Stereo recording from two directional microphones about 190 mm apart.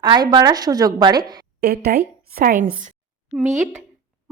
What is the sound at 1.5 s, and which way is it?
A woman's voice, 55° right (ahead or behind).